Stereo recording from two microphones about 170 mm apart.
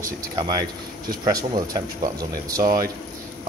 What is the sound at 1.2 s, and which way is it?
Speech, 25° right (ahead or behind).